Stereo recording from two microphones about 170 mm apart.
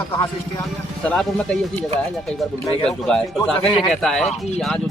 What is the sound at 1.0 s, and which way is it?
Speech, 5° left (ahead or behind).